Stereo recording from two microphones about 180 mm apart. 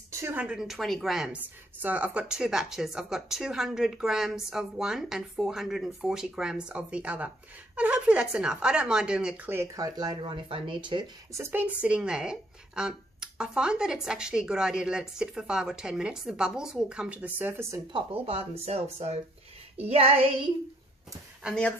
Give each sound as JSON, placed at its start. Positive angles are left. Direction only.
{"t": 0.2, "sound": "a woman's voice", "side_deg": -10}
{"t": 11.3, "sound": "a woman's voice", "side_deg": -10}
{"t": 17.9, "sound": "speech", "side_deg": -30}
{"t": 21.4, "sound": "speech", "side_deg": -5}